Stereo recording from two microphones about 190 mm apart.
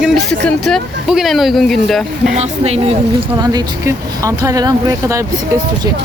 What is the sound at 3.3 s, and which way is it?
Speech, 20° right (ahead or behind).